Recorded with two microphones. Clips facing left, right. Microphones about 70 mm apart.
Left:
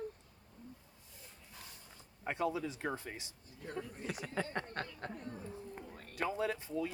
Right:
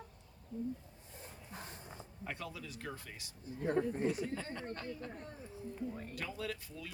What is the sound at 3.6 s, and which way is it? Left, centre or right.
Speech, right.